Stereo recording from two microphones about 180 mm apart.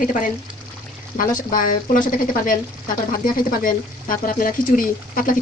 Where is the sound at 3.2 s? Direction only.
50° left (ahead or behind).